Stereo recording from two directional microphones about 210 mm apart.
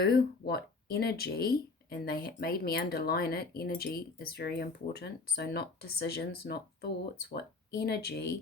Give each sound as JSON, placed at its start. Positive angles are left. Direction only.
{"t": 0.0, "sound": "speech", "side_deg": 50}